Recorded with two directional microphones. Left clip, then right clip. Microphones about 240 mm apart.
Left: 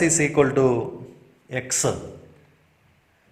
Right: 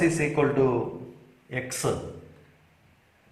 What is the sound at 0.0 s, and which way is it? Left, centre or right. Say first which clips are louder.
Speech: left 4 dB; left.